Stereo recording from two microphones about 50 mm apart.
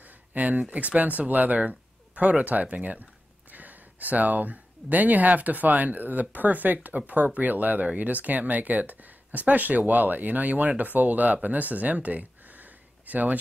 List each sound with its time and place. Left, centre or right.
0.3 s speech: right